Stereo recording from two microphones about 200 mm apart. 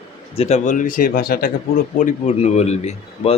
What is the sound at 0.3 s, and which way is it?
Speech, 35° left (ahead or behind).